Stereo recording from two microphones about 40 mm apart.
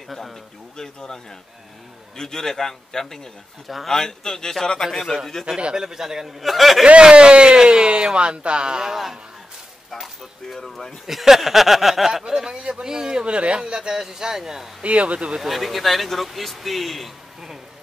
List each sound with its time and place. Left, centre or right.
0.7 s a man's voice: centre
3.6 s a man's voice: centre
3.9 s a man's voice: centre
5.8 s speech: centre
6.4 s a man's voice: centre
7.0 s speech: right
8.9 s speech: centre
10.5 s a man's voice: centre
11.1 s speech: centre
12.5 s speech: right
12.8 s speech: centre
13.2 s speech: right
14.8 s speech: right
15.4 s a man's voice: centre